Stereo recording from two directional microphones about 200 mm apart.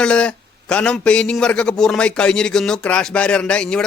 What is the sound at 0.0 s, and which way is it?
A man's voice, 5° left (ahead or behind).